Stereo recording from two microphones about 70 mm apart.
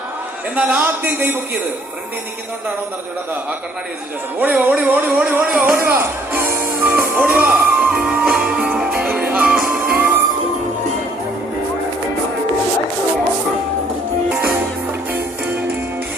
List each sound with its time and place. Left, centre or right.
0.5 s a man's voice: right
4.4 s a man's voice: right
4.9 s music: right